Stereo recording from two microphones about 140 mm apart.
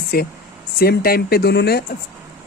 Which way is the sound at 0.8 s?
90° left.